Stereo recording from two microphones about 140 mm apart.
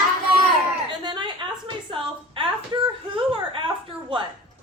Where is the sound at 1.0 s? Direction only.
30° right (ahead or behind).